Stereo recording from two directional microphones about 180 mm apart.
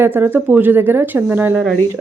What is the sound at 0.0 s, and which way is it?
Speech, 10° right (ahead or behind).